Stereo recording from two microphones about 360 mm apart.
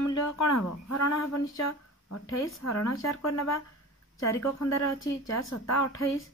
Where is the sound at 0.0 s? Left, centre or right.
Left.